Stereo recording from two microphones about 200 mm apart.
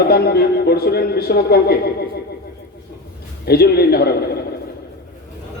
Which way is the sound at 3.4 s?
50° left (ahead or behind).